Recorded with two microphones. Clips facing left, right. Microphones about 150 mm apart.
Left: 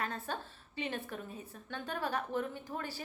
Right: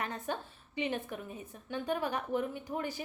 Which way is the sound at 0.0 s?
15° right (ahead or behind).